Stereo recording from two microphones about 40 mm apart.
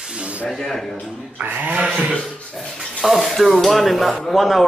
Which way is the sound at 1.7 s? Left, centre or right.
Right.